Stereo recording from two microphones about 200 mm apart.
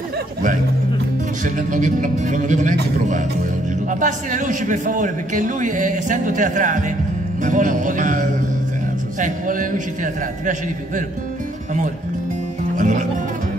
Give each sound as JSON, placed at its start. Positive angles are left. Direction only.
{"t": 1.4, "sound": "a man's voice", "side_deg": -40}
{"t": 12.7, "sound": "music", "side_deg": -40}